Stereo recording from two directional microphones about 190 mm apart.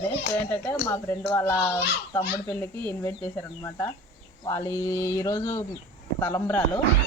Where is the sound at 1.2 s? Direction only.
10° left (ahead or behind).